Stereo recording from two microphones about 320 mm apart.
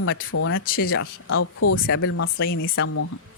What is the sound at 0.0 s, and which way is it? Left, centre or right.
Speech, left.